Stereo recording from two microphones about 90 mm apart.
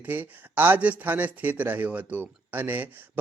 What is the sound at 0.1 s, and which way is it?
A man's voice, 20° right (ahead or behind).